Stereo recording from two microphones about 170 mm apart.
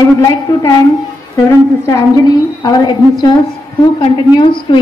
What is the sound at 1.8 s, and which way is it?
A woman's voice, 20° left (ahead or behind).